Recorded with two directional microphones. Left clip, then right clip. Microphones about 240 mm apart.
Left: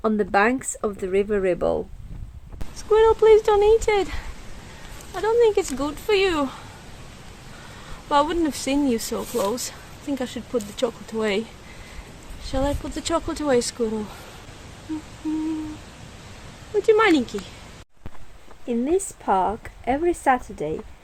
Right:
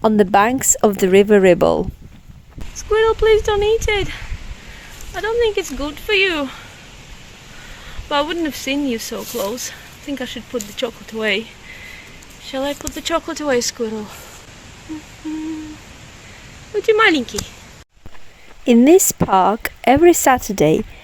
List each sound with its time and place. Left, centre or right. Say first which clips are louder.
0.0 s speech: right 6 dB; right
2.9 s speech: right 1 dB; centre
5.1 s speech: right 1 dB; centre
8.1 s speech: right 1 dB; centre
12.5 s speech: right 3 dB; centre
16.7 s speech: right 4 dB; centre
18.6 s a woman's voice: right 12 dB; right